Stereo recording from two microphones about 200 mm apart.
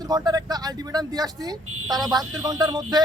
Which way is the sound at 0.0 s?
20° right (ahead or behind).